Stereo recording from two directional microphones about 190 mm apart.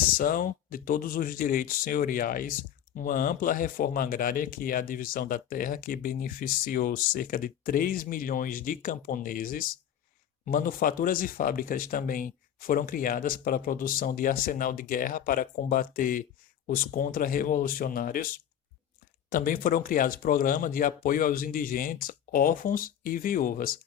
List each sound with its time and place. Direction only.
0.1 s speech: 50° left (ahead or behind)
19.3 s speech: 45° left (ahead or behind)